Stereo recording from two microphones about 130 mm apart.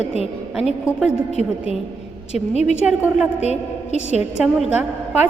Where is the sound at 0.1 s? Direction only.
50° left (ahead or behind).